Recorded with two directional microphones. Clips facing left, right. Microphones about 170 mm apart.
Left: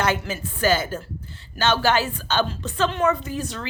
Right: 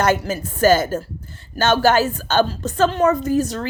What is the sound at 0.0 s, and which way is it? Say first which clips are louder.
A woman's voice: right 5 dB; 45° right (ahead or behind).